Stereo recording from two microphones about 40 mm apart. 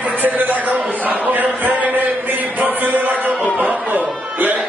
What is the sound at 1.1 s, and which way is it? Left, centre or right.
Speech, right.